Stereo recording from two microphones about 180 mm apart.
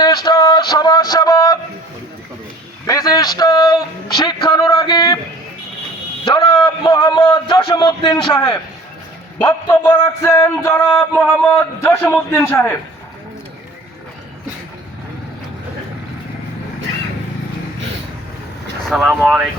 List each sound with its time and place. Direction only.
0.0 s a sound: 20° left (ahead or behind)
2.8 s a man's voice: 20° left (ahead or behind)
6.2 s a man's voice: 25° left (ahead or behind)
9.5 s music: 15° left (ahead or behind)
18.9 s speech: 5° right (ahead or behind)